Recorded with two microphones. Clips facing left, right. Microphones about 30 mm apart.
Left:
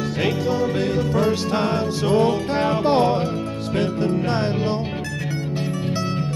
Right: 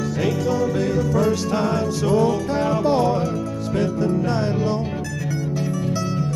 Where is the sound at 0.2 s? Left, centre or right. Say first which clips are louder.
Even; left.